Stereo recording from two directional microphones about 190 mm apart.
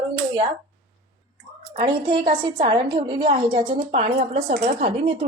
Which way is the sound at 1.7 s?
25° right (ahead or behind).